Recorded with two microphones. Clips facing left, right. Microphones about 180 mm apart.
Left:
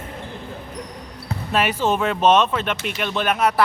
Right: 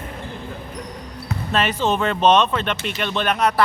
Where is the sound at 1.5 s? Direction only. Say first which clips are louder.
Even; 10° left (ahead or behind).